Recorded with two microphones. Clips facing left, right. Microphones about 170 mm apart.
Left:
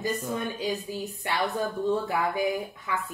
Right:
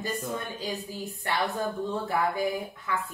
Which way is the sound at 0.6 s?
15° left (ahead or behind).